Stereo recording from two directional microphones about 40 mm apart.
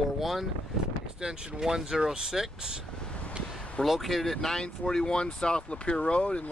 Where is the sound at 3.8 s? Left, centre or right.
Centre.